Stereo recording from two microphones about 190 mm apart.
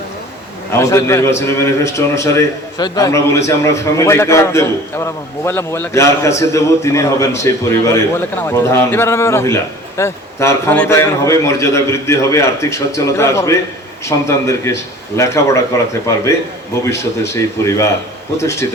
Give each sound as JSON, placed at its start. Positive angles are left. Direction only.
{"t": 0.7, "sound": "a man's voice", "side_deg": 15}